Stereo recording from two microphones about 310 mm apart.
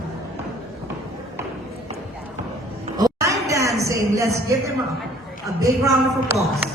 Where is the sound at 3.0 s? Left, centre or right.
Centre.